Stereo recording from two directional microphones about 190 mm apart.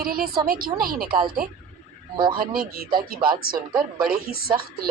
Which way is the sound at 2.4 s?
50° right (ahead or behind).